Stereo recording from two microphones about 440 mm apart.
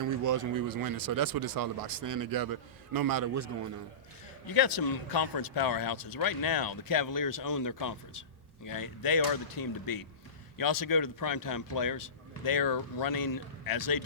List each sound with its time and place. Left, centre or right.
0.0 s speech: right
4.4 s a man's voice: left